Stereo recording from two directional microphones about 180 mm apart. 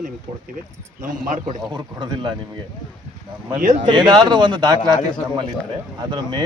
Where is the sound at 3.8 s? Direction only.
25° right (ahead or behind).